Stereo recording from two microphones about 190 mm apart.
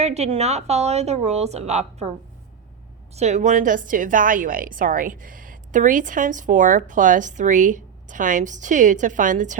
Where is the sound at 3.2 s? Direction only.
35° right (ahead or behind).